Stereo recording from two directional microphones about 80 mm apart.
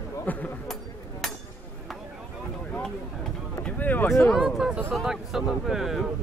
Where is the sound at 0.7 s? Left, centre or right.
Centre.